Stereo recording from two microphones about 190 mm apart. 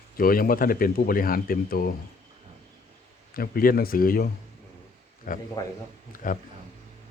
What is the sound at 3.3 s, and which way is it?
Speech, 50° left (ahead or behind).